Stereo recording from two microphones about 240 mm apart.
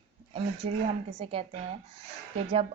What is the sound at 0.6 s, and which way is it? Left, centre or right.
Speech, right.